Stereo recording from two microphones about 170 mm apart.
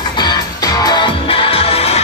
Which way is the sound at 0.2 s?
25° left (ahead or behind).